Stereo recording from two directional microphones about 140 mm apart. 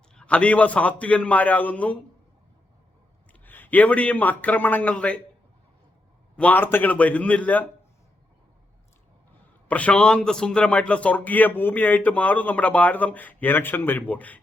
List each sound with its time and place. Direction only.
0.1 s a man's voice: 5° left (ahead or behind)
3.4 s a man's voice: 15° left (ahead or behind)
6.3 s a man's voice: 10° left (ahead or behind)
9.6 s a man's voice: 10° left (ahead or behind)